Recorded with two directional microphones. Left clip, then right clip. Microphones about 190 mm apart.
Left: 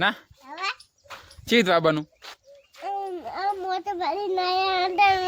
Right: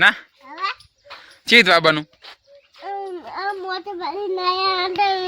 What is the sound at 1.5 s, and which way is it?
Speech, 5° left (ahead or behind).